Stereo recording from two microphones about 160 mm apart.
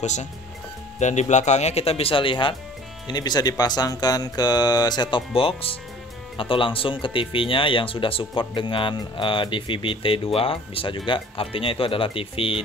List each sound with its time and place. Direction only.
0.0 s speech: 45° left (ahead or behind)